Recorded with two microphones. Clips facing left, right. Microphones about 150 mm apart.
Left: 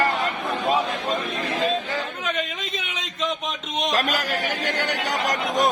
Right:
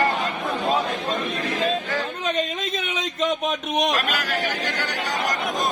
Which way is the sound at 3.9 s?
40° left (ahead or behind).